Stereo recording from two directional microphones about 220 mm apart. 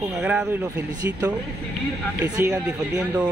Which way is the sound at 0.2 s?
5° right (ahead or behind).